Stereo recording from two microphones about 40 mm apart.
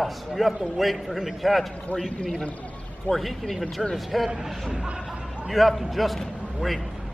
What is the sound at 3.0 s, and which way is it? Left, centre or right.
A man's voice, centre.